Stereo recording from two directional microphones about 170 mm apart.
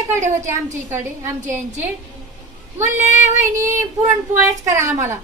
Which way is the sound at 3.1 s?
45° left (ahead or behind).